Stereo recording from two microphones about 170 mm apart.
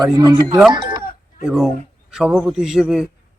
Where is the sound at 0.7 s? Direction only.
25° right (ahead or behind).